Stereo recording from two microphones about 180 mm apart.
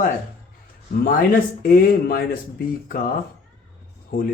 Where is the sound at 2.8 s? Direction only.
55° left (ahead or behind).